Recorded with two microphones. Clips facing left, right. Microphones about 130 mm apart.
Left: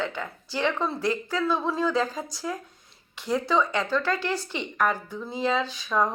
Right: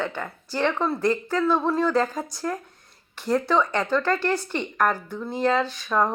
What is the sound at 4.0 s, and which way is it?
Speech, 10° left (ahead or behind).